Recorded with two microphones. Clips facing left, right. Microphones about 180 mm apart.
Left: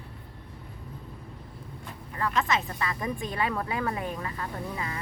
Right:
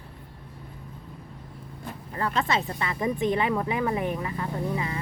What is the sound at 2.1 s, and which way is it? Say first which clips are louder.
Speech: right 1 dB; 30° right (ahead or behind).